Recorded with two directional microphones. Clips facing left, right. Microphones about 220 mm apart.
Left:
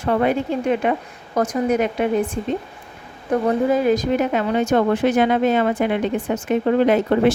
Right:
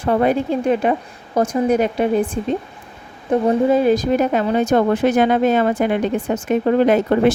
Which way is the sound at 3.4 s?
30° right (ahead or behind).